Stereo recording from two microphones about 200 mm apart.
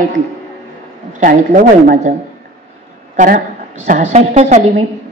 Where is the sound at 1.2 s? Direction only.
40° right (ahead or behind).